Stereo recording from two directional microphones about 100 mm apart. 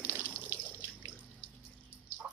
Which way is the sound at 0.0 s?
20° right (ahead or behind).